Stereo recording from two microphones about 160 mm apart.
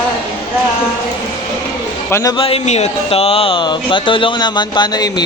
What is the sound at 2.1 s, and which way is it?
Speech, 20° left (ahead or behind).